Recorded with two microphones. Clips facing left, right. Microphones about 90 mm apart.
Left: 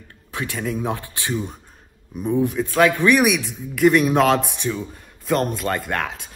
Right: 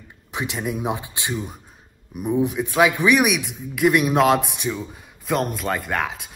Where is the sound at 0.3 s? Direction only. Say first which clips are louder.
Even; 20° right (ahead or behind).